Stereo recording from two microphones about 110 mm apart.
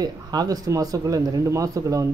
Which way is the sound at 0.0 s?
35° right (ahead or behind).